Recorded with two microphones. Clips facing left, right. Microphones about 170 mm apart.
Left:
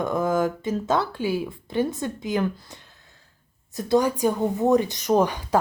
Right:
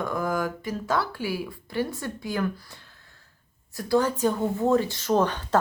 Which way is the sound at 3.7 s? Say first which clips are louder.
Left 2 dB; 20° left (ahead or behind).